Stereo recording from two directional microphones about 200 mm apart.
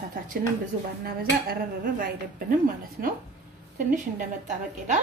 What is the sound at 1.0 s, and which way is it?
A woman's voice, 45° right (ahead or behind).